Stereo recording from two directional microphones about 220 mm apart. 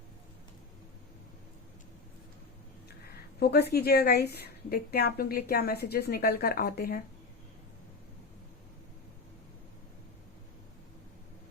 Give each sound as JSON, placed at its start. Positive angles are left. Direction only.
{"t": 3.4, "sound": "a woman's voice", "side_deg": 45}